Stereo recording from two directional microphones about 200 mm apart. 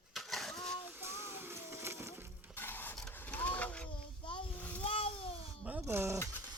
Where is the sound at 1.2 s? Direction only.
10° right (ahead or behind).